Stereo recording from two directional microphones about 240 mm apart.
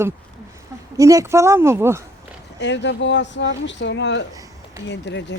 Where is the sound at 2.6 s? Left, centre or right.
Left.